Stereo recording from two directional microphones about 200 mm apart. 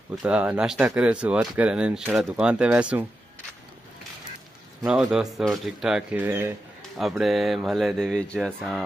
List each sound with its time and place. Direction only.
0.2 s speech: 5° right (ahead or behind)
4.8 s speech: 5° right (ahead or behind)